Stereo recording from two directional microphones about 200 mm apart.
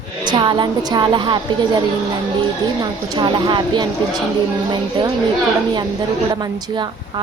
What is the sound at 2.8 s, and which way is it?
A woman's voice, 20° right (ahead or behind).